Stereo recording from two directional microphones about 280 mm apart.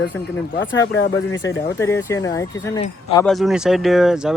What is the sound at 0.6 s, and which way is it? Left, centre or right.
Speech, left.